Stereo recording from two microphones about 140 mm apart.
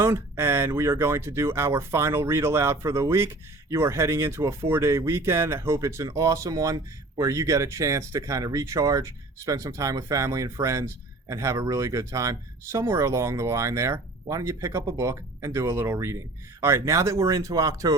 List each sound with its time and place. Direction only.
0.0 s speech: 15° right (ahead or behind)